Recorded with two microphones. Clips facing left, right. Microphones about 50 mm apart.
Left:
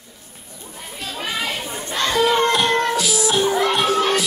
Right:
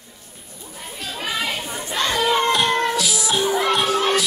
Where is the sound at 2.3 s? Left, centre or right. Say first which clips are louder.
Right 1 dB; centre.